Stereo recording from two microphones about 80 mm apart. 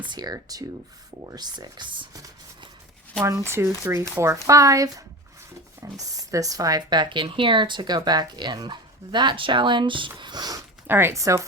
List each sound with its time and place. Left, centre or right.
0.0 s speech: right
1.3 s speech: right
3.2 s speech: right
6.9 s speech: right
10.2 s speech: right
10.8 s speech: right
11.1 s speech: right